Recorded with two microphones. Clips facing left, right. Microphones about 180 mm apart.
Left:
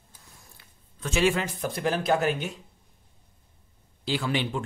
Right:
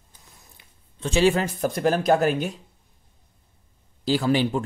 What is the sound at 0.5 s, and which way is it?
Speech, 30° right (ahead or behind).